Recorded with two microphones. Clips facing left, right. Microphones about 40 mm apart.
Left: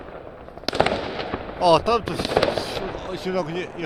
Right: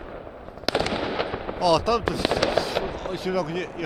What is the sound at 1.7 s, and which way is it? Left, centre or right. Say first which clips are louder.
Speech: left 3 dB; centre.